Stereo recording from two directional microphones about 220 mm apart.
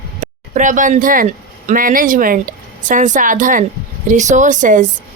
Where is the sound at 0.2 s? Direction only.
35° right (ahead or behind).